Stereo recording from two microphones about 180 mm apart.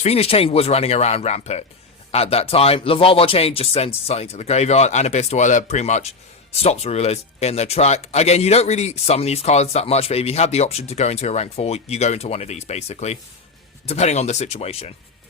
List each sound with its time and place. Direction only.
0.0 s speech: 35° left (ahead or behind)